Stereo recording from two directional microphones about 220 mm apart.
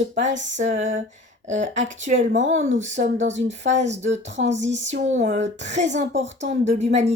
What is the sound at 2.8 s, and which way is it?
Speech, 30° right (ahead or behind).